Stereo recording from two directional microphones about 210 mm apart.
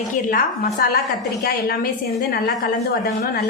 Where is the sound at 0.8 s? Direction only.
45° left (ahead or behind).